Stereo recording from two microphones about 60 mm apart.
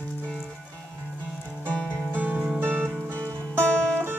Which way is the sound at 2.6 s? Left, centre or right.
Right.